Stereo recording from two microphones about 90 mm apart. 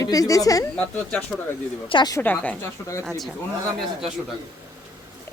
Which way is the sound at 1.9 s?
80° left.